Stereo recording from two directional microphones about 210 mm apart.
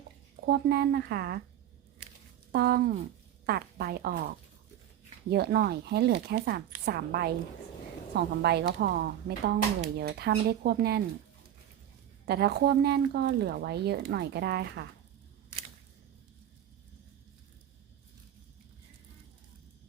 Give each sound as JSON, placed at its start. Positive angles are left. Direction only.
{"t": 0.4, "sound": "speech", "side_deg": -50}
{"t": 2.5, "sound": "speech", "side_deg": -50}
{"t": 12.2, "sound": "speech", "side_deg": -50}